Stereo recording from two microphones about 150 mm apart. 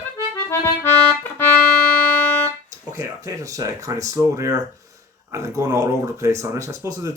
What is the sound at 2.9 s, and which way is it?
Speech, 20° right (ahead or behind).